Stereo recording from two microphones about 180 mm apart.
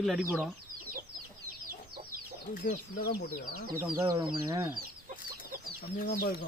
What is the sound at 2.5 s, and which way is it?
Speech, 55° left (ahead or behind).